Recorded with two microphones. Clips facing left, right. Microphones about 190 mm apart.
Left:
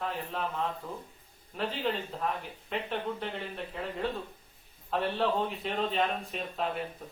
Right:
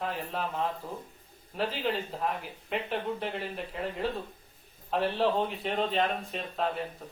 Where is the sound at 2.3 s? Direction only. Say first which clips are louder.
Right 1 dB; centre (ahead or behind).